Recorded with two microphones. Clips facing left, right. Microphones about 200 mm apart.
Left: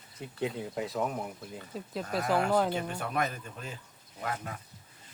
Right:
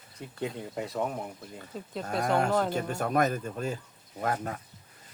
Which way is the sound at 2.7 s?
45° right (ahead or behind).